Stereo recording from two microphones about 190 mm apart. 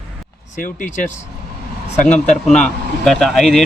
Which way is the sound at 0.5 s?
45° left (ahead or behind).